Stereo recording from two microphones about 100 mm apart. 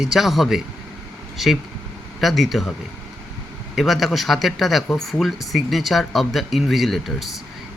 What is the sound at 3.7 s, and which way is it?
Speech, centre (ahead or behind).